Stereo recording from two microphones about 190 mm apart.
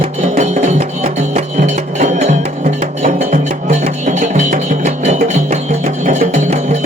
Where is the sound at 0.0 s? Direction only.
35° right (ahead or behind).